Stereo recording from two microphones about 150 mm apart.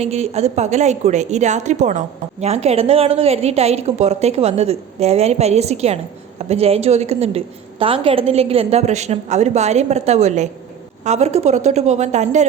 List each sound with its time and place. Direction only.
0.0 s a woman's voice: 45° right (ahead or behind)